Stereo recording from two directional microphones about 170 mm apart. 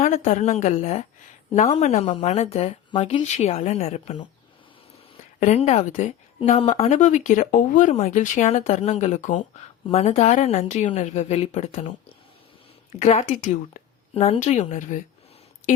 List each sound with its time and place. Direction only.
0.0 s speech: 40° left (ahead or behind)
5.4 s speech: 40° left (ahead or behind)
12.9 s speech: 40° left (ahead or behind)